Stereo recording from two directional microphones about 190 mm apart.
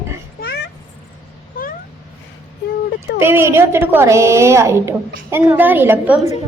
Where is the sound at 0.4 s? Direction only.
60° left (ahead or behind).